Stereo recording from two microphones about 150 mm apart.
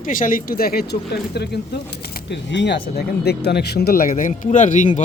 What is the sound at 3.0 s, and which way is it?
Speech, 90° left.